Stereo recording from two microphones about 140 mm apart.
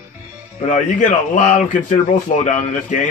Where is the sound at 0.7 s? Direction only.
65° left (ahead or behind).